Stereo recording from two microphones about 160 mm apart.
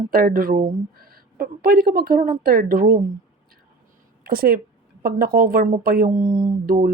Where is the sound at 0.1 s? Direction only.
65° right (ahead or behind).